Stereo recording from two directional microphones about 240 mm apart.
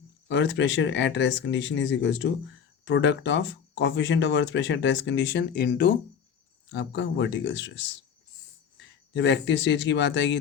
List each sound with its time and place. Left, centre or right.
0.3 s speech: left
9.1 s speech: left